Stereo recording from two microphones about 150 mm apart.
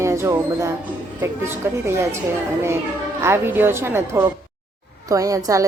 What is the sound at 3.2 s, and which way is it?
A woman's voice, 15° right (ahead or behind).